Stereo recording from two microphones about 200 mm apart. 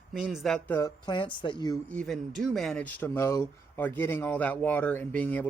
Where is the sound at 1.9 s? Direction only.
5° left (ahead or behind).